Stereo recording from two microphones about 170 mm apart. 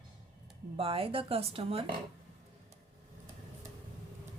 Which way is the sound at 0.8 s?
35° right (ahead or behind).